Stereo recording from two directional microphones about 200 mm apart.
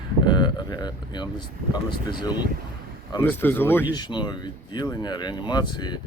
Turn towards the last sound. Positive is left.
turn(degrees=20)  # may be behind; listen again after turning